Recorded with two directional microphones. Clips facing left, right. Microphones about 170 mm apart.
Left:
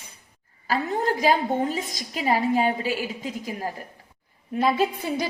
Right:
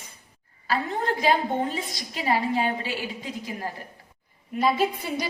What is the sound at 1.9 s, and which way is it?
A woman's voice, 45° left (ahead or behind).